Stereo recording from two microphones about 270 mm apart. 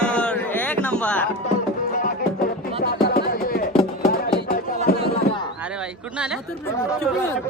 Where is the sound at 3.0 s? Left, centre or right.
Left.